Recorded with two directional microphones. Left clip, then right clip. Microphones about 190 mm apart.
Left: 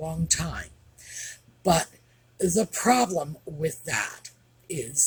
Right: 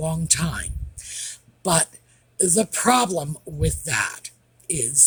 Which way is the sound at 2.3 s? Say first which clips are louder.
Right 3 dB; 50° right (ahead or behind).